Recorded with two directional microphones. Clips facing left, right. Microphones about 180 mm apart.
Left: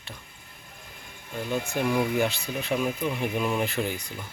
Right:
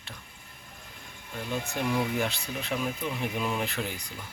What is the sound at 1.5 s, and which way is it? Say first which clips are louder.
Speech: left 3 dB; 5° left (ahead or behind).